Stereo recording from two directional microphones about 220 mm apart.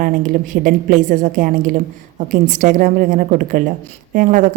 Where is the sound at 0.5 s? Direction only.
40° right (ahead or behind).